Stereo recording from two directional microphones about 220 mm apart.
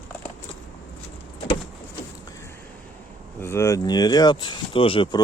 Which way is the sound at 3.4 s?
10° left (ahead or behind).